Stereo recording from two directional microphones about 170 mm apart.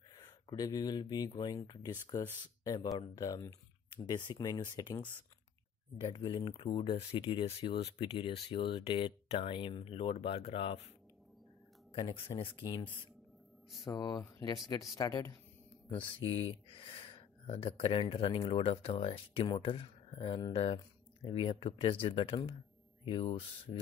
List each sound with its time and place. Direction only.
0.1 s speech: 20° left (ahead or behind)
11.9 s speech: 30° left (ahead or behind)
15.9 s speech: 30° left (ahead or behind)